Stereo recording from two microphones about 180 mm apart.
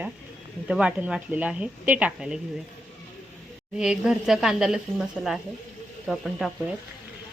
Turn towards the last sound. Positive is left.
turn(degrees=0)  # may be behind; listen again after turning